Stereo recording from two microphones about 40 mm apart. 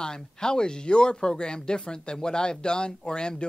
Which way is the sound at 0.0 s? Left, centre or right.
Centre.